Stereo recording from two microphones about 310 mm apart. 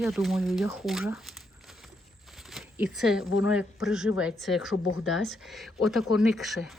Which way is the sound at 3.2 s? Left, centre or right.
Left.